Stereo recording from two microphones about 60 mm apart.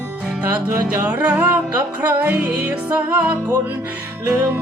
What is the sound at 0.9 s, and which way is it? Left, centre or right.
Music, right.